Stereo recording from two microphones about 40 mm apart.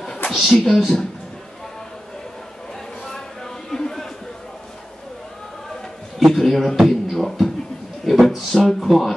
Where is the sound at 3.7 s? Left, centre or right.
Centre.